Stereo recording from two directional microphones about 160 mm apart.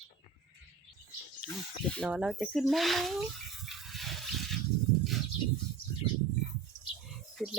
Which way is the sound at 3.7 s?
Centre (ahead or behind).